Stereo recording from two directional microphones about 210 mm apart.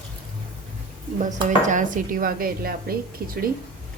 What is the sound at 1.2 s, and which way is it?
Speech, 35° right (ahead or behind).